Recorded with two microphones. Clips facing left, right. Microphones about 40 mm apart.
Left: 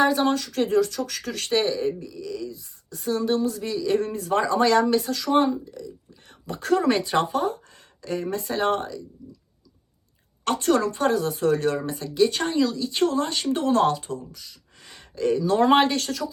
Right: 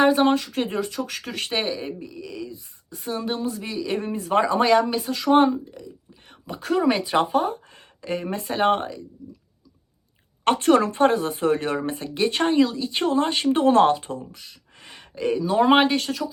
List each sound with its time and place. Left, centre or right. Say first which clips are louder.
0.0 s speech: right 3 dB; right
5.2 s speech: right 8 dB; right
5.7 s whispering: left 2 dB; right
6.6 s speech: even; centre; by 9.0 s right
10.4 s speech: right 4 dB; right; by 16.3 s centre